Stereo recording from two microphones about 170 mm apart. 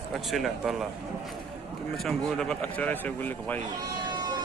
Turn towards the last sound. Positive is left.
turn(degrees=-25)  # may be behind; listen again after turning